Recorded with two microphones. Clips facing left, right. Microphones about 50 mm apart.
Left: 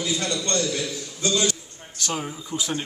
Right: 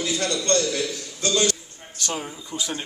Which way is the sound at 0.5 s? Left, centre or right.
Left.